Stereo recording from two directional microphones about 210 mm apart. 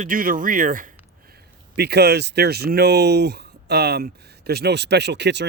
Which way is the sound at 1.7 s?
50° right (ahead or behind).